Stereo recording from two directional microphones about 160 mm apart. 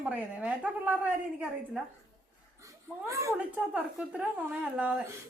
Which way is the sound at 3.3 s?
10° right (ahead or behind).